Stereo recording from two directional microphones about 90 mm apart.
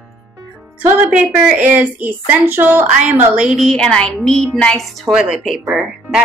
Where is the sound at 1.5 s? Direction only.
15° right (ahead or behind).